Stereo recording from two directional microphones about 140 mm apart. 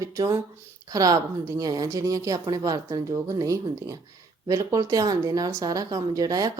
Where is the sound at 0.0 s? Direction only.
25° right (ahead or behind).